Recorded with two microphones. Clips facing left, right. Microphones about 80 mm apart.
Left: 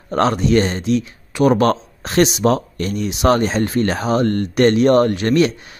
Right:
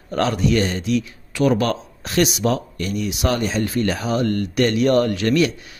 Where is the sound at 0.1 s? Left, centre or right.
Left.